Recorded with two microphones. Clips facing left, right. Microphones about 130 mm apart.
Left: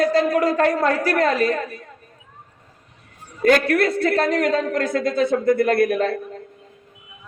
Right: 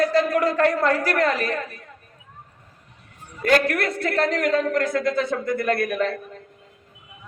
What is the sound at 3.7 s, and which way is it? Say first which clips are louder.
A woman's voice: left 6 dB; 35° left (ahead or behind).